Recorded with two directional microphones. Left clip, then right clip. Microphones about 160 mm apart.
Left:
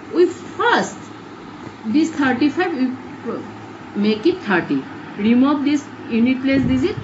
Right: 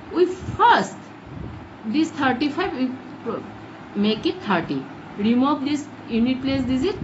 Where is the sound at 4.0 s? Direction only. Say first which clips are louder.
Left 5 dB; 90° right.